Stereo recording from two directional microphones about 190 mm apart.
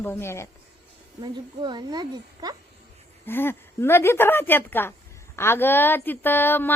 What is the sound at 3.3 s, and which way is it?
Speech, 10° left (ahead or behind).